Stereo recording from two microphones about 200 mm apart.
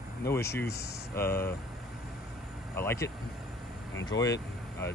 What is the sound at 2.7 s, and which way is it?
Speech, 10° left (ahead or behind).